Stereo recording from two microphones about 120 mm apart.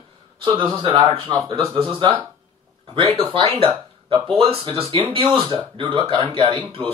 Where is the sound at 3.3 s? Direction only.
50° right (ahead or behind).